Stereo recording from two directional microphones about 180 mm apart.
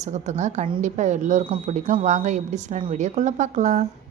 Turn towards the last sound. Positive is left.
turn(degrees=-40)  # may be behind; listen again after turning